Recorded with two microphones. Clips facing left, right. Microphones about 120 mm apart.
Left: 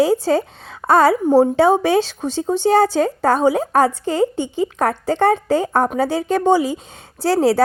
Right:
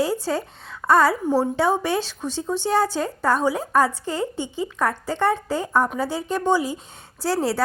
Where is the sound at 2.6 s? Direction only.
75° left (ahead or behind).